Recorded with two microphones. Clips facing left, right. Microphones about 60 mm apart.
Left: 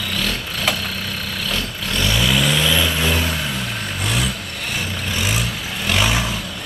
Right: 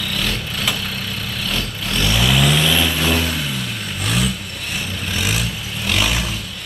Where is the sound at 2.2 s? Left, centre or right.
Centre.